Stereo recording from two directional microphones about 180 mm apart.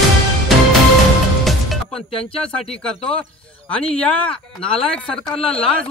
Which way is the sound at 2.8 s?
5° left (ahead or behind).